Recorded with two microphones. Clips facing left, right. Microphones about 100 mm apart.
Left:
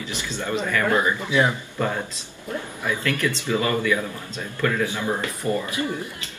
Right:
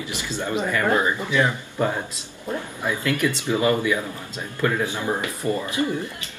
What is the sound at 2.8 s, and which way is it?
Speech, 20° right (ahead or behind).